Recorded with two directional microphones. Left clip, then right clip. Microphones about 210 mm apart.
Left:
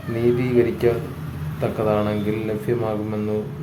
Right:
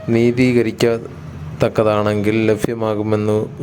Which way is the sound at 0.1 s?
40° right (ahead or behind).